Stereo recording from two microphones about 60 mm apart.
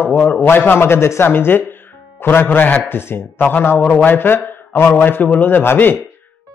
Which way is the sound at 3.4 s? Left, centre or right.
Left.